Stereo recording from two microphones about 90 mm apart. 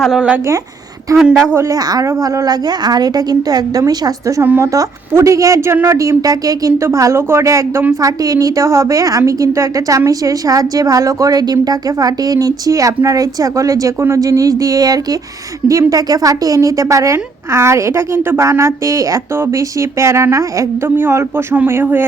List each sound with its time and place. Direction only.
0.0 s speech: 5° right (ahead or behind)
1.1 s a woman's voice: 40° right (ahead or behind)
4.4 s a man's voice: 25° right (ahead or behind)